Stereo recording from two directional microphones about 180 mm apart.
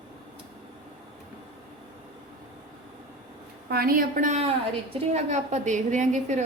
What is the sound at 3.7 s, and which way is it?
A woman's voice, 55° right (ahead or behind).